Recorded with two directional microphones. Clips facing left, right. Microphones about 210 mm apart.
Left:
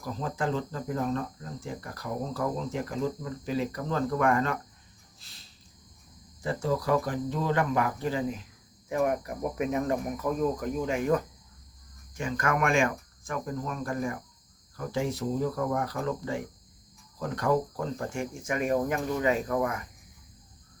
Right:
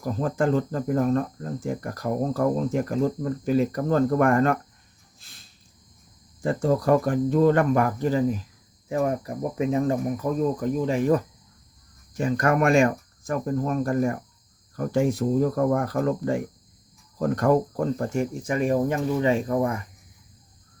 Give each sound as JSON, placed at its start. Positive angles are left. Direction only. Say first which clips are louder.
{"t": 0.0, "sound": "cricket", "louder": "right 7 dB", "side_deg": -50}
{"t": 6.4, "sound": "cricket", "louder": "right 6 dB", "side_deg": -50}
{"t": 8.9, "sound": "speech", "louder": "right 3 dB", "side_deg": -30}
{"t": 14.8, "sound": "cricket", "louder": "right 8 dB", "side_deg": -50}
{"t": 17.2, "sound": "speech", "louder": "right 6 dB", "side_deg": -45}